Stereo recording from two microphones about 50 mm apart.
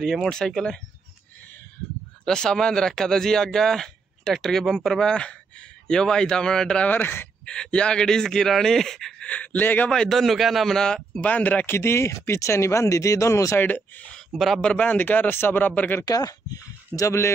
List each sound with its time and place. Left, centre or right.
0.0 s a man's voice: centre
2.2 s speech: centre
6.9 s speech: left
7.4 s speech: centre
9.2 s speech: left
9.8 s a man's voice: centre
11.1 s speech: left
11.6 s speech: left
13.6 s a man's voice: left
14.3 s a man's voice: centre
14.6 s speech: left
14.9 s a man's voice: left
17.0 s speech: left